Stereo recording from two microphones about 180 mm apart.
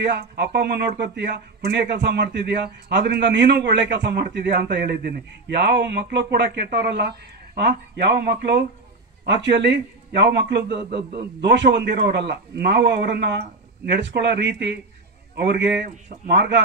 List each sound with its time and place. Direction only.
0.0 s a man's voice: 70° right (ahead or behind)